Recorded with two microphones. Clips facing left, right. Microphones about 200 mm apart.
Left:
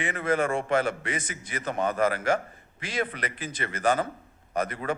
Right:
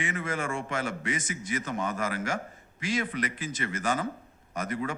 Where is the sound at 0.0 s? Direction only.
60° left (ahead or behind).